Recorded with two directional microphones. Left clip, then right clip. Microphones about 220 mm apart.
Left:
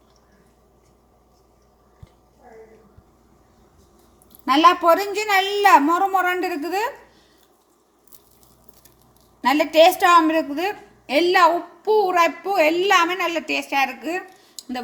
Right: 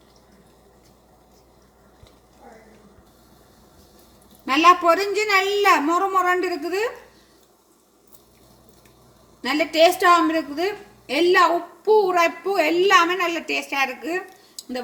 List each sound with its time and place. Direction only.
4.4 s a woman's voice: 30° left (ahead or behind)
9.4 s a woman's voice: 30° left (ahead or behind)